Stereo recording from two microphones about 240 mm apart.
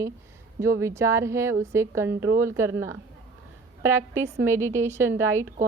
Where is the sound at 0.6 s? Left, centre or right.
Centre.